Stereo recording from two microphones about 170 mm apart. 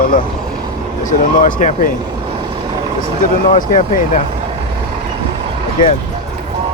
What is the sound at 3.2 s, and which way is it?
Speech, 50° left (ahead or behind).